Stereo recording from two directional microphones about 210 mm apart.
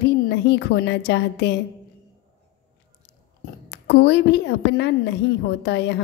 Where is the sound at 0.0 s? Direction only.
50° left (ahead or behind).